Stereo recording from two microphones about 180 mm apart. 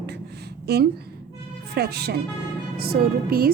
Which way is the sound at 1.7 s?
65° right (ahead or behind).